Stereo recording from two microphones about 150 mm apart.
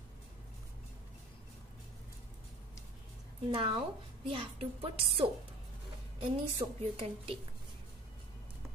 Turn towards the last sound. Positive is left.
turn(degrees=-40)  # may be behind; listen again after turning